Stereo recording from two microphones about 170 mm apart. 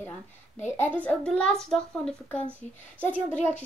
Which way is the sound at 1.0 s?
5° left (ahead or behind).